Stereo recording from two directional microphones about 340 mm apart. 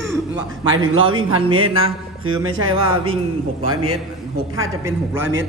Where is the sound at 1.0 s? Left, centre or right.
Centre.